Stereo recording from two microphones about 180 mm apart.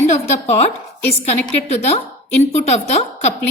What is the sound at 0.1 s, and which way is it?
A woman's voice, 35° left (ahead or behind).